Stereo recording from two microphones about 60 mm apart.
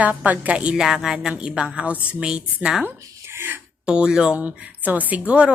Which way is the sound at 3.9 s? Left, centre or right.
Centre.